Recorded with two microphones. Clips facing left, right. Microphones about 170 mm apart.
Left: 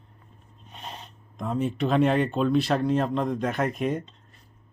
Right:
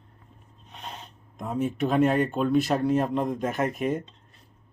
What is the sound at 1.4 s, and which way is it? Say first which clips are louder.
Speech: even; 5° right (ahead or behind).